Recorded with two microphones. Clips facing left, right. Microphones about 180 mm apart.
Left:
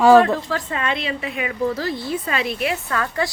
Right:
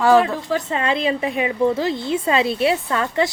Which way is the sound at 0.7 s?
30° right (ahead or behind).